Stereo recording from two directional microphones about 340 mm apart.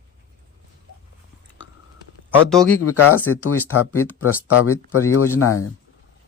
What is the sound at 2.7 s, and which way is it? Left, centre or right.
Speech, left.